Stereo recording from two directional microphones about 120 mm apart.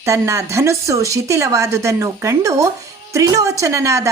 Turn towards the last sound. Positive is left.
turn(degrees=-25)  # may be behind; listen again after turning